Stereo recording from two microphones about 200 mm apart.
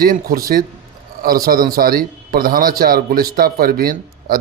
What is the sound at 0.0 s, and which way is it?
A man's voice, 45° right (ahead or behind).